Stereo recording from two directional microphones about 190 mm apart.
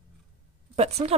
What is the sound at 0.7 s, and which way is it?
Speech, 35° right (ahead or behind).